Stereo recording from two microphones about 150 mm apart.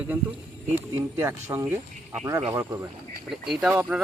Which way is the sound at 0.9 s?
15° right (ahead or behind).